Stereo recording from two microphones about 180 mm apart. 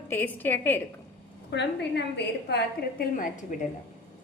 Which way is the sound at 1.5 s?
70° left (ahead or behind).